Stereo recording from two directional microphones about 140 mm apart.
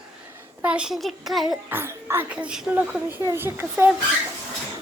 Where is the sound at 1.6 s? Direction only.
15° right (ahead or behind).